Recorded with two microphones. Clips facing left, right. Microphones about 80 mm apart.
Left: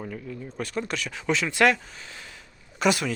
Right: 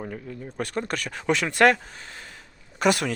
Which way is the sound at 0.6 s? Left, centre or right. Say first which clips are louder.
Right 2 dB; right.